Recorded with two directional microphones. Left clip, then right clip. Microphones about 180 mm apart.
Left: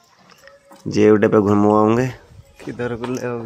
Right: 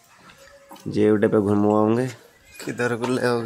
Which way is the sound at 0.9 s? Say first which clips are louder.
Left 5 dB; centre (ahead or behind).